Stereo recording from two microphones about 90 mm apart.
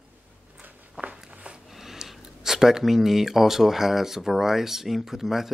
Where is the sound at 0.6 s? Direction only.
20° right (ahead or behind).